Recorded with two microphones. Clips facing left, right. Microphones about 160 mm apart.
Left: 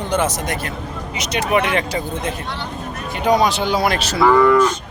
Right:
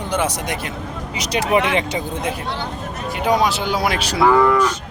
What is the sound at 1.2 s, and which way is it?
Speech, 30° right (ahead or behind).